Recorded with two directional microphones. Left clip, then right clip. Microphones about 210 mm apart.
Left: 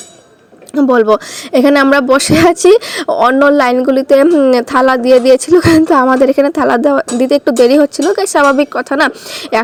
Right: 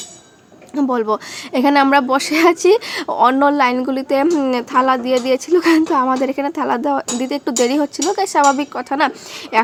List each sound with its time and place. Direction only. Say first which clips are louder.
0.8 s a woman's voice: left 9 dB; 20° left (ahead or behind)